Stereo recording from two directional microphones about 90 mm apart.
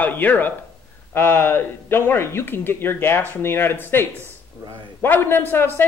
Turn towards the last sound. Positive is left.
turn(degrees=25)  # may be behind; listen again after turning